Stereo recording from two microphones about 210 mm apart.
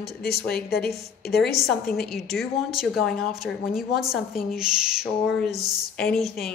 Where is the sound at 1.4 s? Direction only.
Centre (ahead or behind).